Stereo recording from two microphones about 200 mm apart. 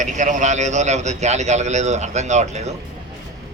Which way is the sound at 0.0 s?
40° right (ahead or behind).